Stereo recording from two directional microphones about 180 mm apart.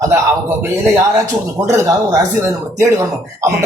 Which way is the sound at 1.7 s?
15° right (ahead or behind).